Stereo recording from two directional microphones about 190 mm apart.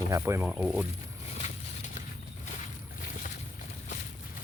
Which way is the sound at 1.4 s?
40° left (ahead or behind).